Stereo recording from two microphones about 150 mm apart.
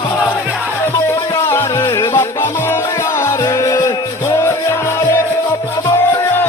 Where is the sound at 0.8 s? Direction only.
15° left (ahead or behind).